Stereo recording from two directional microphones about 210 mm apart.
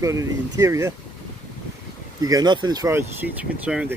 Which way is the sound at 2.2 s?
15° right (ahead or behind).